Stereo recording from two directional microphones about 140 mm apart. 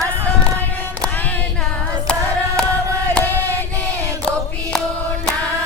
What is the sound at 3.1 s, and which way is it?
Chant, 10° left (ahead or behind).